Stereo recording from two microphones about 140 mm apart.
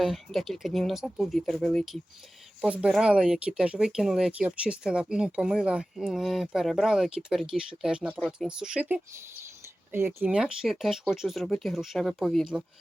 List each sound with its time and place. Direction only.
0.0 s speech: centre (ahead or behind); by 10.3 s 15° right (ahead or behind)
10.3 s speech: 5° right (ahead or behind)